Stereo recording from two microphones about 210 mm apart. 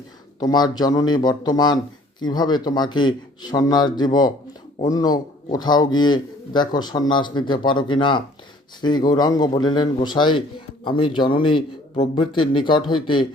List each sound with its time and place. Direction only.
0.3 s speech: 20° left (ahead or behind)